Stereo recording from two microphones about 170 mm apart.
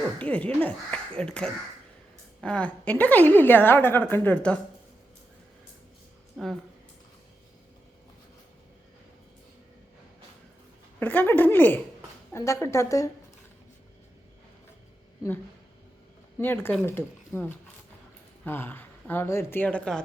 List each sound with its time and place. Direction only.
0.2 s a woman's voice: 10° left (ahead or behind)
6.3 s speech: centre (ahead or behind)
11.0 s a woman's voice: 10° left (ahead or behind)
16.4 s a woman's voice: 10° left (ahead or behind)